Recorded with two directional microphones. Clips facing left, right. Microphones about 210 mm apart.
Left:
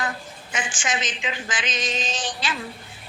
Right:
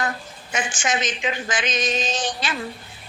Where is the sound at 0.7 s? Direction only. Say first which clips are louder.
Right 4 dB; 40° right (ahead or behind).